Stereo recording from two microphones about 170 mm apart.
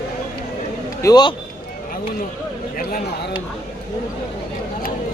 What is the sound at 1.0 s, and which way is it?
Speech, 25° left (ahead or behind).